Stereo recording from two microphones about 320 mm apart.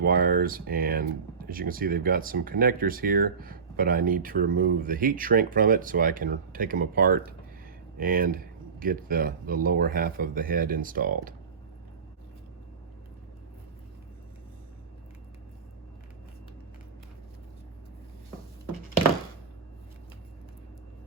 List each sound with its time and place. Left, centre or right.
0.0 s speech: right